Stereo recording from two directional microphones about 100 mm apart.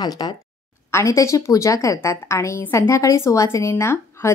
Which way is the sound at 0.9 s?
30° left (ahead or behind).